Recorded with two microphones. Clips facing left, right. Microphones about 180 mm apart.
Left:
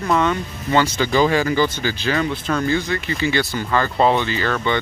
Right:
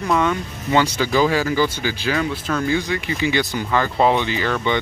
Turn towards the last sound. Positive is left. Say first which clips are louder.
# even
turn(degrees=-15)  # may be behind; listen again after turning